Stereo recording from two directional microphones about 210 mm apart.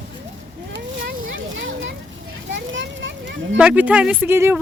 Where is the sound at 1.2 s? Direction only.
60° right (ahead or behind).